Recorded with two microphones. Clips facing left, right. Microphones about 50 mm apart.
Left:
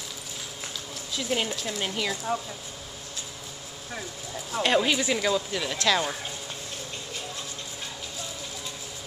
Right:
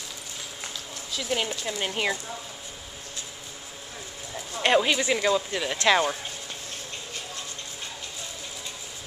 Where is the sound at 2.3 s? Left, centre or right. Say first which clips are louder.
Left 9 dB; left.